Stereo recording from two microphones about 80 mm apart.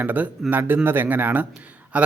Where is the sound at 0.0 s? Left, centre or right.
Right.